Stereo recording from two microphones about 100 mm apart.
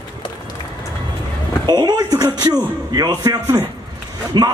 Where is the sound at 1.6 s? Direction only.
45° right (ahead or behind).